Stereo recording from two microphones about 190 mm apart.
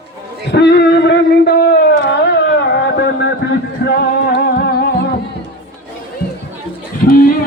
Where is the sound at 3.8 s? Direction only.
65° left (ahead or behind).